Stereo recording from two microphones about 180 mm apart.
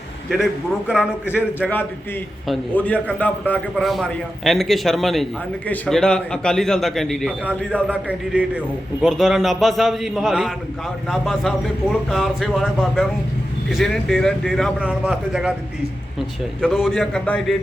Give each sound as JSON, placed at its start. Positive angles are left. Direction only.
{"t": 0.9, "sound": "a man's voice", "side_deg": -5}
{"t": 2.5, "sound": "a man's voice", "side_deg": 10}
{"t": 8.0, "sound": "a man's voice", "side_deg": -10}